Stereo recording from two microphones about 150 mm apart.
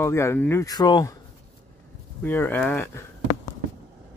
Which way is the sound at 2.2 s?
15° left (ahead or behind).